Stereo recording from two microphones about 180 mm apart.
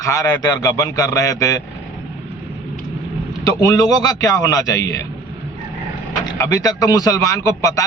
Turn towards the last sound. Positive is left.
turn(degrees=15)  # may be behind; listen again after turning